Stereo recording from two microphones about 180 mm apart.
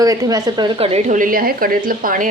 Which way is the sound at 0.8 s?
35° right (ahead or behind).